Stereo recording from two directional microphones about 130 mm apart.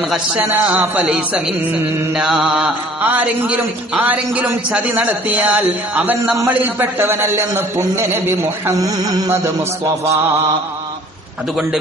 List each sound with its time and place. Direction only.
0.1 s a man's voice: 10° right (ahead or behind)